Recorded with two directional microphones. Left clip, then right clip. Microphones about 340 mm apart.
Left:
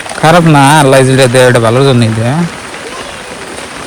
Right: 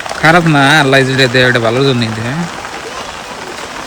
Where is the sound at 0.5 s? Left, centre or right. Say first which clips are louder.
Left 3 dB; left.